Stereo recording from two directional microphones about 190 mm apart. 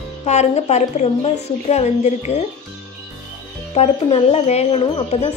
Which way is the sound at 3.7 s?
35° left (ahead or behind).